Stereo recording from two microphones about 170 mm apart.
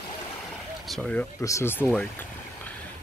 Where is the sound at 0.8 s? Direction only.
5° left (ahead or behind).